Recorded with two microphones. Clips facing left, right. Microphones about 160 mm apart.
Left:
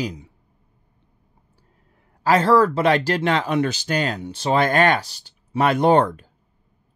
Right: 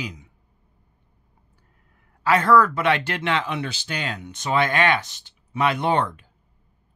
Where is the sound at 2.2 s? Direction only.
35° left (ahead or behind).